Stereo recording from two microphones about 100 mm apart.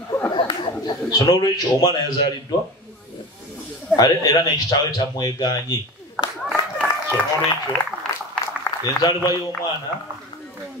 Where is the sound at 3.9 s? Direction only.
40° left (ahead or behind).